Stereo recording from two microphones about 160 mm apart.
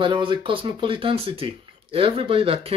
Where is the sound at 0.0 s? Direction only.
30° right (ahead or behind).